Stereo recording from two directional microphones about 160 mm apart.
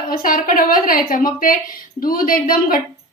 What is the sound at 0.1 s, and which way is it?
A woman's voice, 60° left (ahead or behind).